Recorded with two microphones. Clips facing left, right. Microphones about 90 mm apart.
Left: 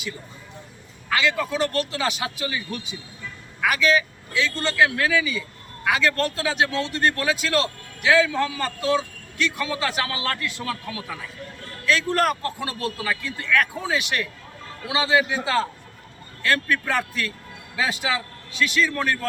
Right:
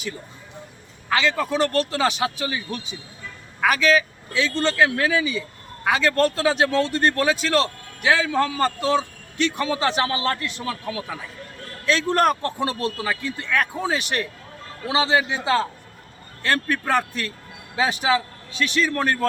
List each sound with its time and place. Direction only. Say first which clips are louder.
1.1 s a man's voice: right 2 dB; 30° right (ahead or behind)
4.4 s a man's voice: right 1 dB; 30° right (ahead or behind)